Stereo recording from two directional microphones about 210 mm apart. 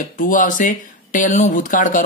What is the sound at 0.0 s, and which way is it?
Speech, 40° left (ahead or behind).